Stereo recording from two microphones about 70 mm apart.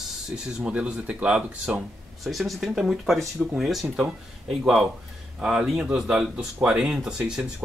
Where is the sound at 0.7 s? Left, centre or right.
Centre.